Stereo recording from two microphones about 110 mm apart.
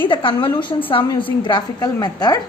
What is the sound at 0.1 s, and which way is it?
A woman's voice, 50° left (ahead or behind).